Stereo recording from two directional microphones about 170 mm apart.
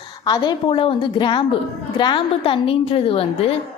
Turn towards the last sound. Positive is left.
turn(degrees=35)  # may be behind; listen again after turning